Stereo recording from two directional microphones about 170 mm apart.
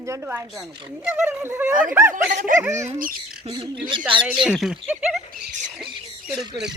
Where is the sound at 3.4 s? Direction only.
35° right (ahead or behind).